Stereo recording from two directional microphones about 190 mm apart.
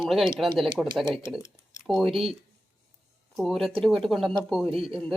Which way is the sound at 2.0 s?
30° right (ahead or behind).